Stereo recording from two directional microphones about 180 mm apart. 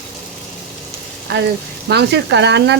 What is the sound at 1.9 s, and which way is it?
Speech, 70° right (ahead or behind).